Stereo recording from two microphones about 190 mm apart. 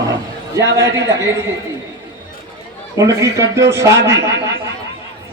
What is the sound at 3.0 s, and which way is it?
A man's voice, 15° right (ahead or behind).